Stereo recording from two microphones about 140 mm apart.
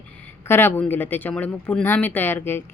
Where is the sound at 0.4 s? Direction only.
15° left (ahead or behind).